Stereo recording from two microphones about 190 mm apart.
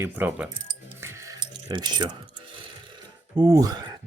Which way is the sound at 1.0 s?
15° right (ahead or behind).